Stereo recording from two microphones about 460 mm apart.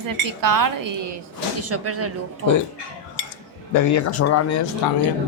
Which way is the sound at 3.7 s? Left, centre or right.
Left.